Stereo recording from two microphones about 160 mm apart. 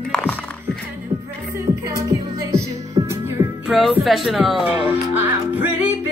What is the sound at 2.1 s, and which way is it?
Music, 20° right (ahead or behind).